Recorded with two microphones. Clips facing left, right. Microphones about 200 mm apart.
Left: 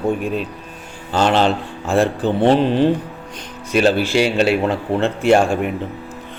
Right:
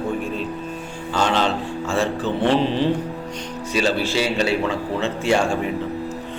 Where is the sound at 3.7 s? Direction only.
60° left (ahead or behind).